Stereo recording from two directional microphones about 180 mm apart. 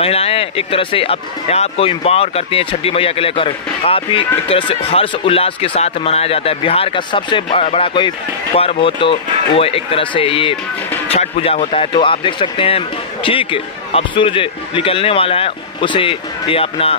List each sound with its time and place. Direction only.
0.0 s speech: 35° left (ahead or behind)